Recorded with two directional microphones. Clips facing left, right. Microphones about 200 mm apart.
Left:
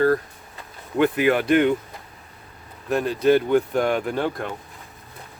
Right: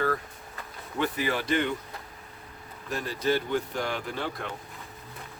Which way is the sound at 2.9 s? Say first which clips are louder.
Left 9 dB; 60° left (ahead or behind).